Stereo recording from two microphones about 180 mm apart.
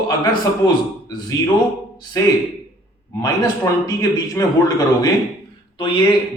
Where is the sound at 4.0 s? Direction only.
20° left (ahead or behind).